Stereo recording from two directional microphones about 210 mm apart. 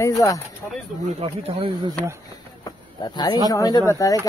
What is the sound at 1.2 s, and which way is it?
Speech, 25° right (ahead or behind).